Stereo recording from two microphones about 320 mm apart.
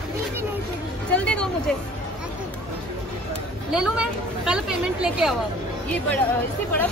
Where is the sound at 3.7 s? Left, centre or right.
Centre.